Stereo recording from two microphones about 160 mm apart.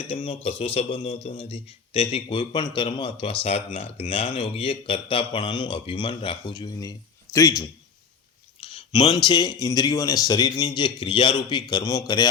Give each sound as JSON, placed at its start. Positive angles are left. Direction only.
{"t": 0.1, "sound": "a man's voice", "side_deg": 35}
{"t": 8.6, "sound": "a sound", "side_deg": 35}
{"t": 9.1, "sound": "a man's voice", "side_deg": 25}